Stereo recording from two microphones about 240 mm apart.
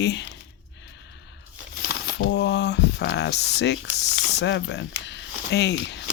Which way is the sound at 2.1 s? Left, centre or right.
Left.